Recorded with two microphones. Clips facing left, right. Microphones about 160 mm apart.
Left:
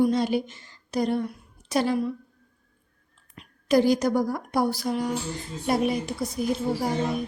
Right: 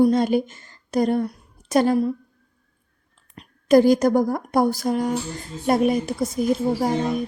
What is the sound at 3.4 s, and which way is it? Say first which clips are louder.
A woman's voice: right 6 dB; 45° right (ahead or behind).